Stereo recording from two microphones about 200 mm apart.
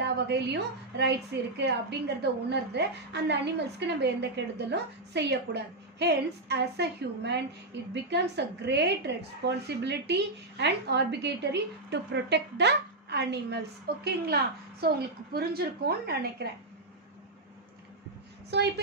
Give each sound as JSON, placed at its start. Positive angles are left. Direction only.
{"t": 0.0, "sound": "a woman's voice", "side_deg": -55}
{"t": 18.5, "sound": "a woman's voice", "side_deg": -60}